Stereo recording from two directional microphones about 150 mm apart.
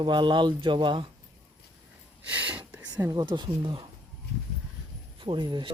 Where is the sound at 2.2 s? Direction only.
10° right (ahead or behind).